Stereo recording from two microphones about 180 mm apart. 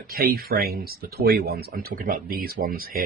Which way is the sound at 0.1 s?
55° right (ahead or behind).